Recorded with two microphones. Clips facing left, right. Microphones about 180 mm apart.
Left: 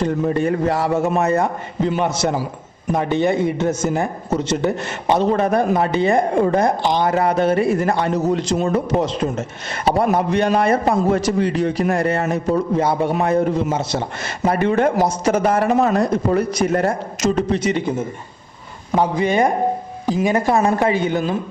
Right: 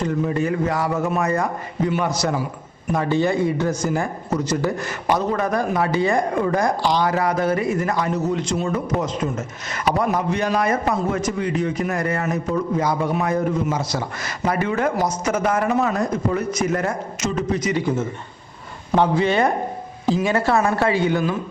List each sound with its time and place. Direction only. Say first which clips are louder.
0.0 s a man's voice: left 3 dB; 30° left (ahead or behind)
18.9 s speech: left 1 dB; 15° left (ahead or behind)